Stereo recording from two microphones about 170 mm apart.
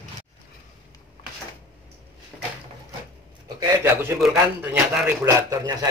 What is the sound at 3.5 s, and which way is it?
Speech, 15° right (ahead or behind).